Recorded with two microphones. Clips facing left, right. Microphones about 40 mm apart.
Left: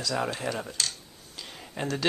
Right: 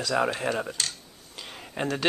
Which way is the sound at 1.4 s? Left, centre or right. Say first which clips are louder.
Right 3 dB; centre.